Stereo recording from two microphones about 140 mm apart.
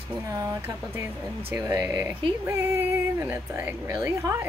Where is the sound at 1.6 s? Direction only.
20° right (ahead or behind).